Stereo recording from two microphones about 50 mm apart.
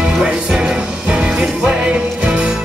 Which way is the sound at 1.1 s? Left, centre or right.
Centre.